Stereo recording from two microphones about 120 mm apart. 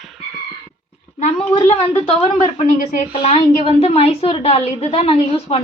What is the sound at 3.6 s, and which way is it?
A woman's voice, 55° left (ahead or behind).